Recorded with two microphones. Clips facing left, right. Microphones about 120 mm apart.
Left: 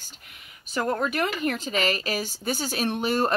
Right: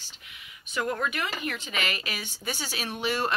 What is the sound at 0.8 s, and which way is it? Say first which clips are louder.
Speech: left 4 dB; 35° left (ahead or behind).